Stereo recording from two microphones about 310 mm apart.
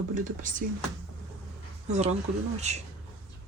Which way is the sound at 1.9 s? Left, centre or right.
Right.